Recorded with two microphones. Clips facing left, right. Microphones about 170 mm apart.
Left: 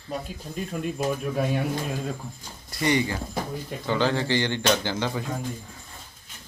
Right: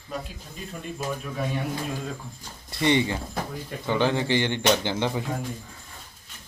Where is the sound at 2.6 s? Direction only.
25° right (ahead or behind).